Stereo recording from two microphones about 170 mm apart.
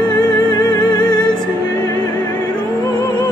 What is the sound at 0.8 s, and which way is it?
Music, 25° left (ahead or behind).